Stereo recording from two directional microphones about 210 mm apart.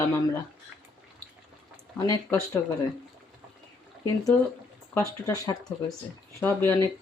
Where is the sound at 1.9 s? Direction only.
15° left (ahead or behind).